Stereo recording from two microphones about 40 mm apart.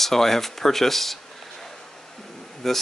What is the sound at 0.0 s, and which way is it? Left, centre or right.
Speech, centre.